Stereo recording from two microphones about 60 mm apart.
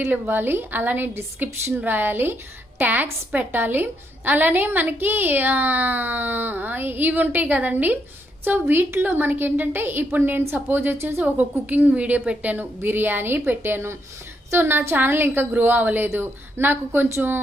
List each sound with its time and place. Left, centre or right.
0.0 s a woman's voice: right
2.8 s a woman's voice: right
11.2 s a woman's voice: right